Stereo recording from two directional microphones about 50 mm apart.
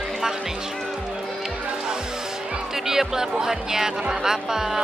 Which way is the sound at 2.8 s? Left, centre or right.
Centre.